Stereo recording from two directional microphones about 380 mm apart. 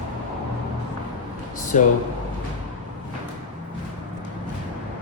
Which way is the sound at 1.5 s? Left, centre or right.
Left.